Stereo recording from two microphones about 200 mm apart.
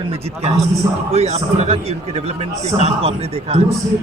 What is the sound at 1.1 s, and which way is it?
Speech, 30° right (ahead or behind).